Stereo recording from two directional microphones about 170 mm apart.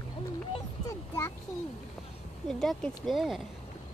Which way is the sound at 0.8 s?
20° left (ahead or behind).